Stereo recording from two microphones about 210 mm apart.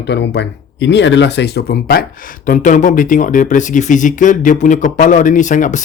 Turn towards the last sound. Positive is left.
turn(degrees=35)  # may be behind; listen again after turning